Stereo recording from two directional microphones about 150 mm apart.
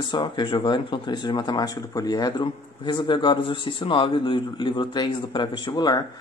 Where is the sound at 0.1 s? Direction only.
30° left (ahead or behind).